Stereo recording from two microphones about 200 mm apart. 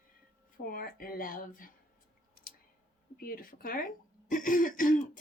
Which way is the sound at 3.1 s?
45° left (ahead or behind).